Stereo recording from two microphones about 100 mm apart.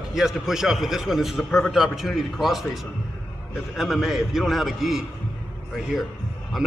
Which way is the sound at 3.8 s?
Centre (ahead or behind).